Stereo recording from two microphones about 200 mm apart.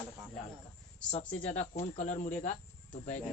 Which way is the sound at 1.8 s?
35° left (ahead or behind).